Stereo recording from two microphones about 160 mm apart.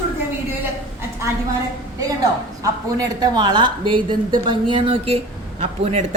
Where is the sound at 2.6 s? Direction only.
20° right (ahead or behind).